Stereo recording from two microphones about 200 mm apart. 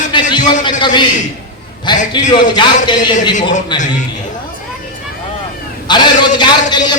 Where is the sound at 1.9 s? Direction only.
20° left (ahead or behind).